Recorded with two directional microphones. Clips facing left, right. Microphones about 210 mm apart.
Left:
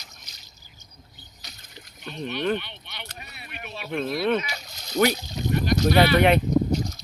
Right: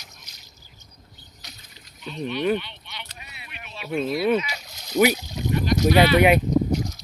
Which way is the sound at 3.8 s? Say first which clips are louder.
Right 2 dB; 5° right (ahead or behind).